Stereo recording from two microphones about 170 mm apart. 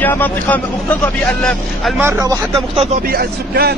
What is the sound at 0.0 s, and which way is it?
Speech, 10° left (ahead or behind).